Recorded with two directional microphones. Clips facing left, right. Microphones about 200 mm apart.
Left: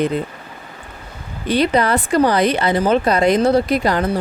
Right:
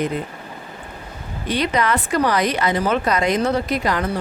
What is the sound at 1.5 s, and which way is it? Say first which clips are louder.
Speech: left 4 dB; 30° left (ahead or behind).